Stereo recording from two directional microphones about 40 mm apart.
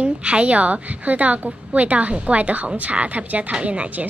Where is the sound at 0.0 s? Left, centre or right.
Right.